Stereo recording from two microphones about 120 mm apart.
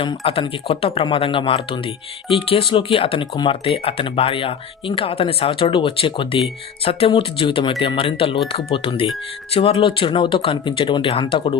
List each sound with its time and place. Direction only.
0.2 s speech: 50° left (ahead or behind)